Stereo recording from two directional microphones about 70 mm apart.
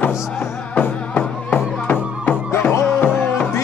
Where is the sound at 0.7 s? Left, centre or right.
Left.